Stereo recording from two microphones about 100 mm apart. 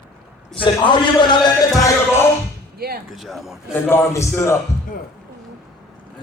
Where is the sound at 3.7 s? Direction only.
25° left (ahead or behind).